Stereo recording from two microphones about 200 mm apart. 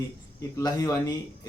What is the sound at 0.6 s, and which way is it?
Speech, 15° left (ahead or behind).